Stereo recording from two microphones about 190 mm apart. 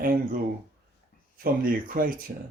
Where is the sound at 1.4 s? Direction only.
50° right (ahead or behind).